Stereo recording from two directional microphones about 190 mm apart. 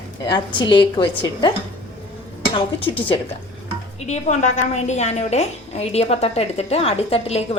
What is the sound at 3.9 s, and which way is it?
A woman's voice, 35° left (ahead or behind).